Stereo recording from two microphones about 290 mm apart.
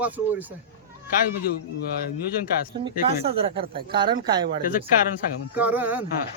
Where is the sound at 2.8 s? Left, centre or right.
Centre.